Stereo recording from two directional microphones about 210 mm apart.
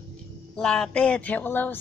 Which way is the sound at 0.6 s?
5° left (ahead or behind).